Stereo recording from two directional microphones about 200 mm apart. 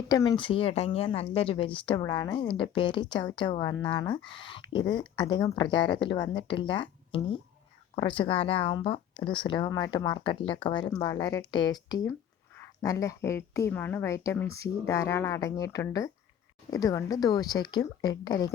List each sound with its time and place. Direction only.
0.1 s a woman's voice: 20° left (ahead or behind)